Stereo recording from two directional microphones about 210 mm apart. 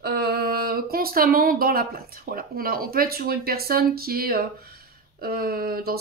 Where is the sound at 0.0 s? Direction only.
50° right (ahead or behind).